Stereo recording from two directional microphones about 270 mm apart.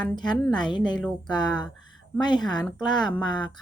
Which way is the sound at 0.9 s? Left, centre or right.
Centre.